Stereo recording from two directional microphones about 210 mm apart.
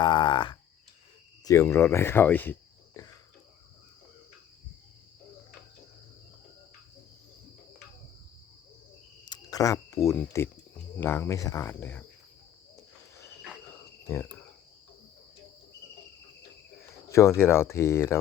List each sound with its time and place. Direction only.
0.0 s speech: 20° left (ahead or behind)
9.2 s speech: 20° left (ahead or behind)
12.7 s cricket: 15° left (ahead or behind)
14.1 s speech: 10° left (ahead or behind)
17.2 s speech: 10° left (ahead or behind)